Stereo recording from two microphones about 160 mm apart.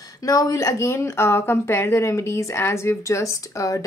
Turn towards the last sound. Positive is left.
turn(degrees=20)  # may be behind; listen again after turning